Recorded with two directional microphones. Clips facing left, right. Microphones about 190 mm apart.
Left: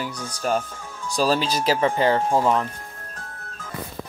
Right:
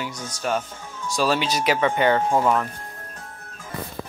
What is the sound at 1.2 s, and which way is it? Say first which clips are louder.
Speech: left 1 dB; 35° left (ahead or behind).